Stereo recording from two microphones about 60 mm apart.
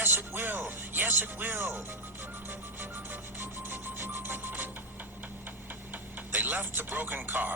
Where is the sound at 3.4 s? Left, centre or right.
Right.